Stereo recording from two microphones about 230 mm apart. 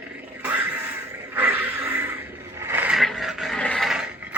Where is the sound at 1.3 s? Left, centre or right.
Centre.